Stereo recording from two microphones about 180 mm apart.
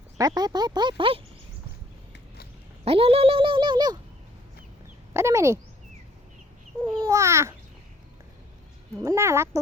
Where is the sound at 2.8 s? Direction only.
30° right (ahead or behind).